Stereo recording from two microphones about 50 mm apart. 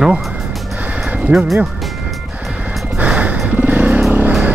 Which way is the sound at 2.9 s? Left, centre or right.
Right.